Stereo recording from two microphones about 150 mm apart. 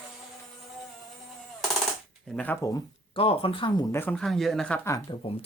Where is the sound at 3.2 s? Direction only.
35° left (ahead or behind).